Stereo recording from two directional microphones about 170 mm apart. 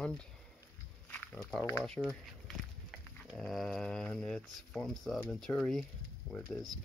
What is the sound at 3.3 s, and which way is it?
Speech, centre (ahead or behind).